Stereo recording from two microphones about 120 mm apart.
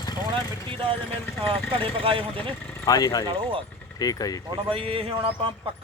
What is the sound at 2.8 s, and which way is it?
Speech, 30° left (ahead or behind).